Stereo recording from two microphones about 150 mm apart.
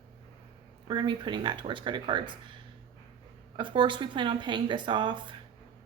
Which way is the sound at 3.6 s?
30° right (ahead or behind).